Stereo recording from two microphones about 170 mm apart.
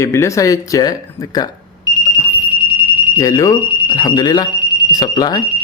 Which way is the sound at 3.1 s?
20° left (ahead or behind).